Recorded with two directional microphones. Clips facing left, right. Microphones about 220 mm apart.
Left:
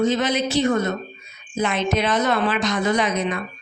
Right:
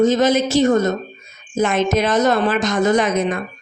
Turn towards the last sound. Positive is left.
turn(degrees=-45)  # may be behind; listen again after turning